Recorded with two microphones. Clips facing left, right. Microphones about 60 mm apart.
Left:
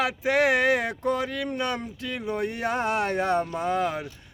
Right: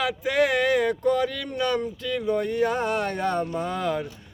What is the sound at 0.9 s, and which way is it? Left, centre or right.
Speech, left.